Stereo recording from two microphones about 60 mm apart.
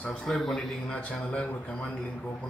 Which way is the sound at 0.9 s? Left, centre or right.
Centre.